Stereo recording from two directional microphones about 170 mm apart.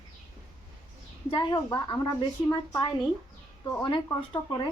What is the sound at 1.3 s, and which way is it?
Speech, 25° left (ahead or behind).